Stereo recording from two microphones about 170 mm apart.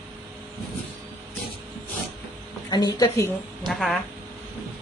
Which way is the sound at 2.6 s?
25° left (ahead or behind).